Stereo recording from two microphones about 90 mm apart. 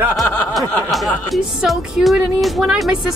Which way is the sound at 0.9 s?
Centre (ahead or behind).